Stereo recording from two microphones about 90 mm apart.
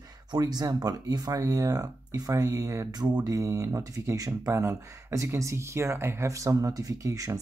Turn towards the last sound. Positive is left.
turn(degrees=-35)  # may be behind; listen again after turning